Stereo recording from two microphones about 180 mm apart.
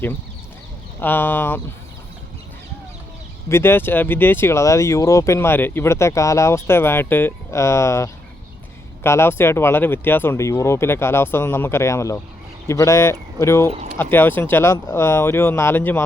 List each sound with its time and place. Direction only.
1.0 s speech: 10° left (ahead or behind)
3.5 s speech: 15° left (ahead or behind)